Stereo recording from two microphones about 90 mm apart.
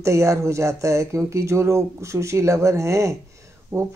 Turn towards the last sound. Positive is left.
turn(degrees=-30)  # may be behind; listen again after turning